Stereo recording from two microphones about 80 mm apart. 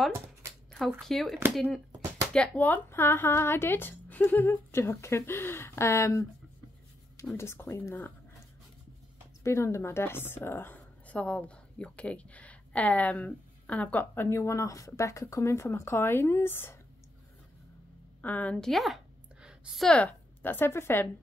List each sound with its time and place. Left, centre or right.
0.7 s speech: centre
2.3 s a woman's voice: centre; by 6.2 s left
7.3 s a woman's voice: left
9.4 s a woman's voice: left
11.1 s a woman's voice: centre
18.2 s a woman's voice: centre
18.6 s speech: centre
19.4 s a sound: centre
20.0 s speech: left